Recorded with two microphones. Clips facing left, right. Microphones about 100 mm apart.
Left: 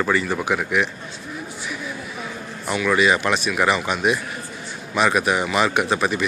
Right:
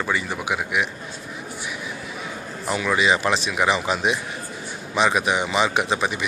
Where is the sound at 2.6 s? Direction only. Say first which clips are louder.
Left 2 dB; 30° right (ahead or behind).